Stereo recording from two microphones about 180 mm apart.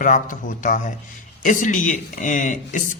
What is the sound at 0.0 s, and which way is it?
Speech, 45° left (ahead or behind).